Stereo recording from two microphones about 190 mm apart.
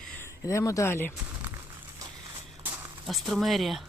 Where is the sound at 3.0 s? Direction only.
Centre (ahead or behind).